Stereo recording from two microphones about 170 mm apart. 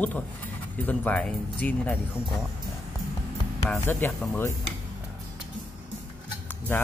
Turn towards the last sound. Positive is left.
turn(degrees=10)  # may be behind; listen again after turning